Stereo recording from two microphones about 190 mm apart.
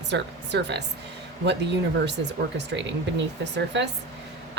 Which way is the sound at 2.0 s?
65° right (ahead or behind).